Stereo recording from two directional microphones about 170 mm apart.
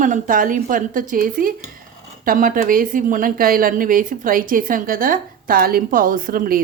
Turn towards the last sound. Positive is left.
turn(degrees=-55)  # may be behind; listen again after turning